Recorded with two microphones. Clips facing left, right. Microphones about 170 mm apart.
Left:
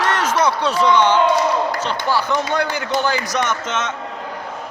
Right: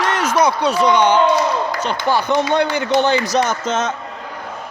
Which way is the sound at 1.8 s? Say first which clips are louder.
Right 2 dB; 15° right (ahead or behind).